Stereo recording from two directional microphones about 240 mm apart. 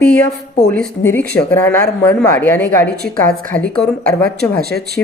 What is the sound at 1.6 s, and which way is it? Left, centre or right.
A woman's voice, centre.